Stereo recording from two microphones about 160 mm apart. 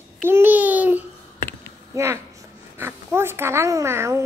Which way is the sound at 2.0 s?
15° right (ahead or behind).